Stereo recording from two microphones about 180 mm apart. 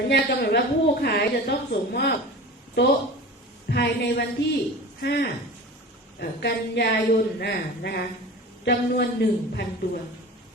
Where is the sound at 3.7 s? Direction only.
65° left (ahead or behind).